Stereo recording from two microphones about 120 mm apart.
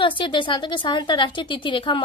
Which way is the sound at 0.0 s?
40° left (ahead or behind).